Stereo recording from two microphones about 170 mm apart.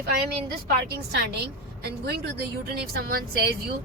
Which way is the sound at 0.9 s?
80° right.